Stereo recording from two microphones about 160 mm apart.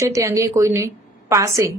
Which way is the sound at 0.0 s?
20° right (ahead or behind).